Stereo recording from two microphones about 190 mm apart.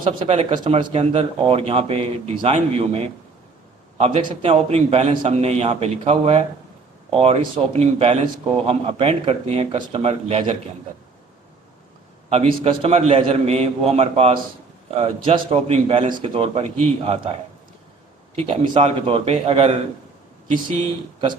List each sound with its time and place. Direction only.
0.0 s a man's voice: 30° right (ahead or behind)
12.6 s a man's voice: 30° right (ahead or behind)
18.3 s a man's voice: 30° right (ahead or behind)
20.8 s speech: 30° right (ahead or behind)